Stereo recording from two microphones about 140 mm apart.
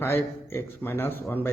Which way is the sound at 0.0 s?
15° left (ahead or behind).